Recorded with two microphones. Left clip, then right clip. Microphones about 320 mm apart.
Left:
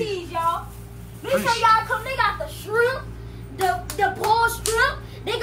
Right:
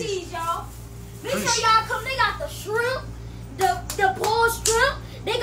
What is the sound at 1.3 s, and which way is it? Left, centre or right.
Speech, centre.